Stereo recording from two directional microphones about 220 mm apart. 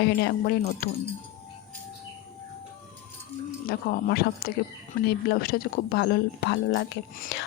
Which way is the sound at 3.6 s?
45° left (ahead or behind).